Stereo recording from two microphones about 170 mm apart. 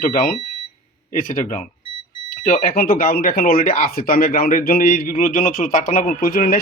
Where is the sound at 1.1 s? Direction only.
50° left (ahead or behind).